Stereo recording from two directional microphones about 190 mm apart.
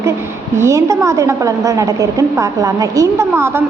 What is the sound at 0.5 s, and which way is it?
A woman's voice, 15° right (ahead or behind).